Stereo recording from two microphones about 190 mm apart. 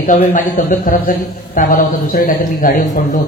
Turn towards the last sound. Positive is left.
turn(degrees=50)  # may be behind; listen again after turning